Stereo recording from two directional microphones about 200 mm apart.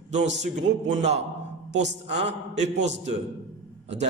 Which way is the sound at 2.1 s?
35° right (ahead or behind).